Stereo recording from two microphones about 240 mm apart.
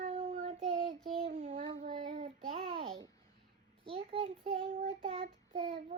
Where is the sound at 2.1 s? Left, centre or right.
Right.